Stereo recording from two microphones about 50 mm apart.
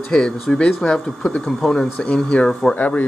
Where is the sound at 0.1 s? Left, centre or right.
Centre.